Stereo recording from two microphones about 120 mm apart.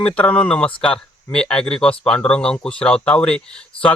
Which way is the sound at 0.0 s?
10° left (ahead or behind).